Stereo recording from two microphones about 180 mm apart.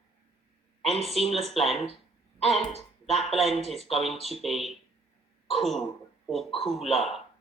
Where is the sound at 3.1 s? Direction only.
Centre (ahead or behind).